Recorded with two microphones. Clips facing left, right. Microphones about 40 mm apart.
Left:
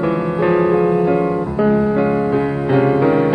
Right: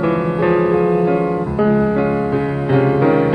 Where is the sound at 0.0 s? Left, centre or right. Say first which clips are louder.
Right 1 dB; centre.